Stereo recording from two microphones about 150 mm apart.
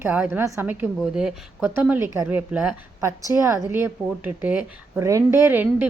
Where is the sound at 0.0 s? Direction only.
15° right (ahead or behind).